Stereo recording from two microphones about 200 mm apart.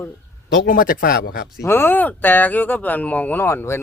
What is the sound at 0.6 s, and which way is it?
Speech, 45° left (ahead or behind).